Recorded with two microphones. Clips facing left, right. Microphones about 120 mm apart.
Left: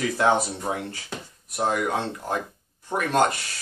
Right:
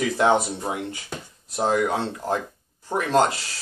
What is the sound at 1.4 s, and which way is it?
Speech, 30° right (ahead or behind).